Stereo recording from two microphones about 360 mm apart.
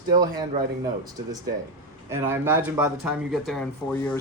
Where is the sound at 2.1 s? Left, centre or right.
Centre.